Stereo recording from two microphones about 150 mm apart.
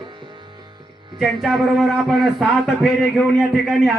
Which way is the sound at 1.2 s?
Centre (ahead or behind).